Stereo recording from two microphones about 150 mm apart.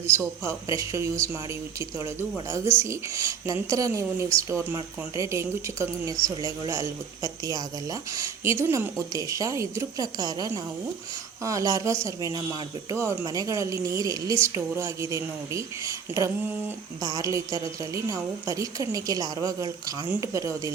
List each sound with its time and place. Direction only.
0.2 s speech: 20° right (ahead or behind)
2.5 s speech: 15° right (ahead or behind)
16.1 s a sound: 15° right (ahead or behind)
17.0 s speech: 25° right (ahead or behind)